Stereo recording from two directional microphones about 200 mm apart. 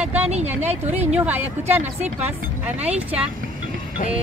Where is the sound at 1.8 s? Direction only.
35° right (ahead or behind).